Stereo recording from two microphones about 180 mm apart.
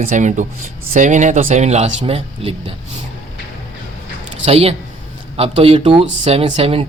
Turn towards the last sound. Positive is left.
turn(degrees=-35)  # may be behind; listen again after turning